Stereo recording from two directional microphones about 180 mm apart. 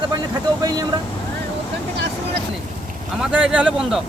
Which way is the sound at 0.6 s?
20° right (ahead or behind).